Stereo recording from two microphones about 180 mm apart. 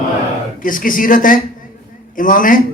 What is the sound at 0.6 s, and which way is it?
A man's voice, 50° left (ahead or behind).